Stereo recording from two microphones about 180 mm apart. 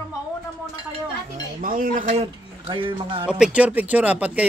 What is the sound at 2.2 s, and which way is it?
Speech, 30° right (ahead or behind).